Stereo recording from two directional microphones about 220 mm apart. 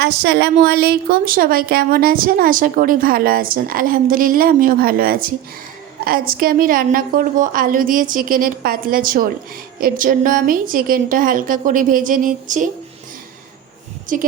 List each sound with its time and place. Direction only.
0.0 s speech: 50° right (ahead or behind)
14.1 s a woman's voice: 35° right (ahead or behind)